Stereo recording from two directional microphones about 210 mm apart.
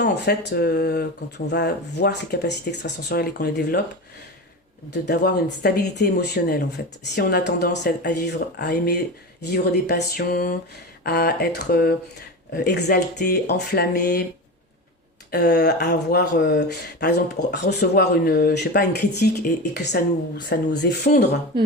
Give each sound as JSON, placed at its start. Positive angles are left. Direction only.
{"t": 0.0, "sound": "speech", "side_deg": 50}
{"t": 5.0, "sound": "speech", "side_deg": 50}
{"t": 15.3, "sound": "speech", "side_deg": 50}